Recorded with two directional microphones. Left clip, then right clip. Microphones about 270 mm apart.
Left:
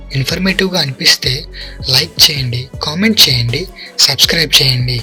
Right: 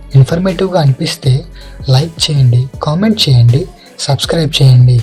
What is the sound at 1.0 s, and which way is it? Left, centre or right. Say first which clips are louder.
Speech: left 7 dB; left.